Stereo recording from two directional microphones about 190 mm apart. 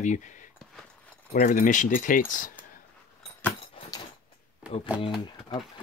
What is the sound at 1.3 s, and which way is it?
Speech, 45° left (ahead or behind).